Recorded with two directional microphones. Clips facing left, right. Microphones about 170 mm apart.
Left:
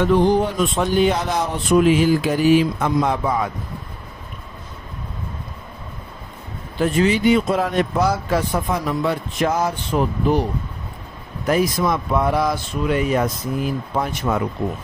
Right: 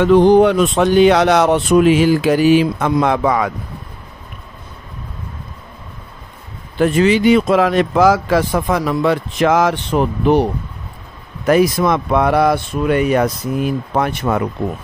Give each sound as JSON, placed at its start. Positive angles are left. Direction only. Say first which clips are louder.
{"t": 0.0, "sound": "speech", "louder": "right 7 dB", "side_deg": -75}
{"t": 6.8, "sound": "speech", "louder": "right 5 dB", "side_deg": -85}